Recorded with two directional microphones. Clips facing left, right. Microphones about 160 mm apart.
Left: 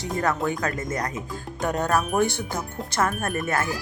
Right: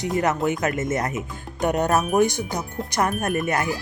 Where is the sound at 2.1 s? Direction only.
15° right (ahead or behind).